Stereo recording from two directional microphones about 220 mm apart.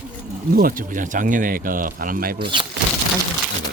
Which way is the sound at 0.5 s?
40° right (ahead or behind).